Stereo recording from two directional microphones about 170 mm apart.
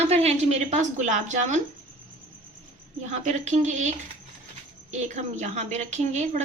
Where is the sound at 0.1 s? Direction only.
40° right (ahead or behind).